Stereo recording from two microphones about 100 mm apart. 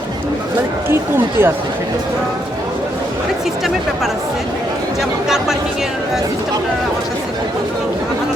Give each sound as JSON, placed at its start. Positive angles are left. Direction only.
{"t": 0.9, "sound": "speech", "side_deg": -25}